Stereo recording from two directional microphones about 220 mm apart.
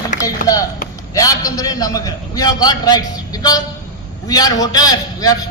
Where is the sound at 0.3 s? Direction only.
15° left (ahead or behind).